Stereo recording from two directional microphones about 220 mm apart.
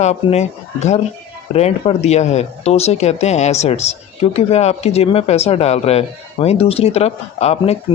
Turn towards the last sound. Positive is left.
turn(degrees=30)  # may be behind; listen again after turning